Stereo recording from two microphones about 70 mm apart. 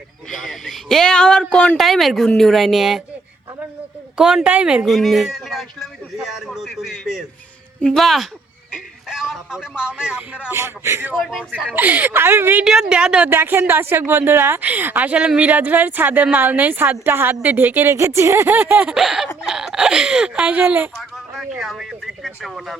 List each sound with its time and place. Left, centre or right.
0.3 s speech: centre
1.8 s speech: centre
4.2 s speech: centre
4.9 s speech: centre
10.5 s a woman's voice: right
12.6 s speech: centre
13.3 s a woman's voice: right
18.5 s speech: centre
21.6 s speech: centre